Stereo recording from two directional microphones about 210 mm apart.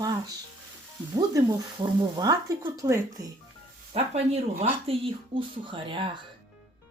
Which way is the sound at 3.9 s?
30° right (ahead or behind).